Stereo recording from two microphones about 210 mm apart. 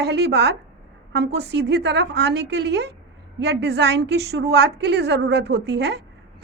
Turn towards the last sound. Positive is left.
turn(degrees=-55)  # may be behind; listen again after turning